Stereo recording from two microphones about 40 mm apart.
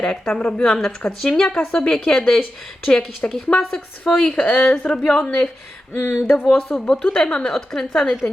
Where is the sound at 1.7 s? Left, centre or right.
Centre.